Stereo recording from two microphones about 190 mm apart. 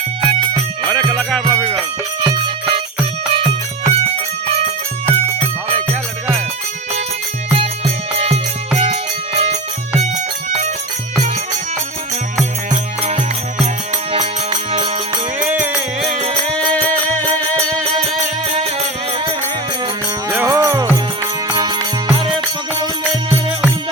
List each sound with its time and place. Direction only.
0.2 s music: 25° right (ahead or behind)
0.9 s music: 5° left (ahead or behind)
2.2 s music: 25° right (ahead or behind)
8.8 s music: 35° right (ahead or behind)
12.7 s music: 40° right (ahead or behind)
16.7 s music: 10° left (ahead or behind)
20.3 s music: 15° right (ahead or behind)